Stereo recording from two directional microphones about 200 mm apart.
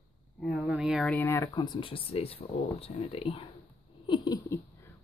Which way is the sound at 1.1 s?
15° left (ahead or behind).